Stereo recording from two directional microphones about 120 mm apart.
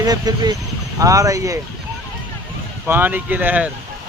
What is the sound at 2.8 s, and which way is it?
Speech, 15° right (ahead or behind).